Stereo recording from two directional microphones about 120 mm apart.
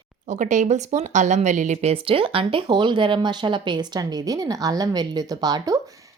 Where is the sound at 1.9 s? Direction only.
50° right (ahead or behind).